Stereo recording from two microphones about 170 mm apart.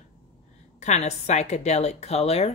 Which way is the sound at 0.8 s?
40° left (ahead or behind).